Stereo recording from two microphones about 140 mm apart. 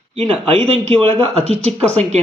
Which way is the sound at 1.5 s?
50° right (ahead or behind).